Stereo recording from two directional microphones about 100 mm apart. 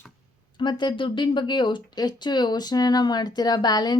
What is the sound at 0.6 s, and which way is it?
Speech, 50° left (ahead or behind).